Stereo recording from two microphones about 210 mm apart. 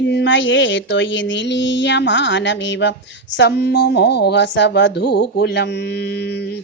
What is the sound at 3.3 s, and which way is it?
Speech, 50° left (ahead or behind).